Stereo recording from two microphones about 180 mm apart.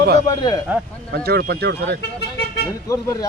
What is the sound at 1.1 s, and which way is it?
Speech, 60° right (ahead or behind).